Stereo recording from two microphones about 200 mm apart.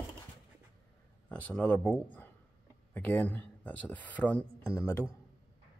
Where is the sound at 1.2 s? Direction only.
5° left (ahead or behind).